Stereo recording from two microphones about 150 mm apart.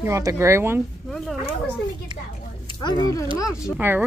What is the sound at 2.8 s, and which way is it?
Speech, 30° left (ahead or behind).